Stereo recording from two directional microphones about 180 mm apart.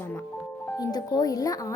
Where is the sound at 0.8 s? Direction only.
20° left (ahead or behind).